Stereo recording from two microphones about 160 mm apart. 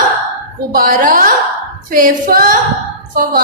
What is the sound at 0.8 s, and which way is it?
A woman's voice, 60° right (ahead or behind).